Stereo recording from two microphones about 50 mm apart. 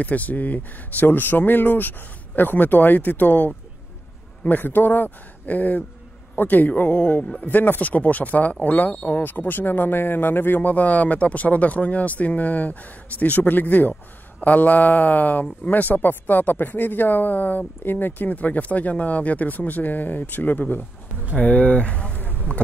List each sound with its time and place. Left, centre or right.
0.0 s speech: left
10.6 s speech: left